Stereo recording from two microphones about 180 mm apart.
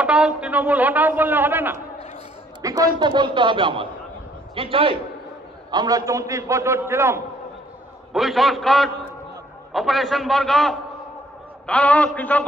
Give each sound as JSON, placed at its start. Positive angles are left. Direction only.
{"t": 0.0, "sound": "a man's voice", "side_deg": -5}
{"t": 8.1, "sound": "a man's voice", "side_deg": 0}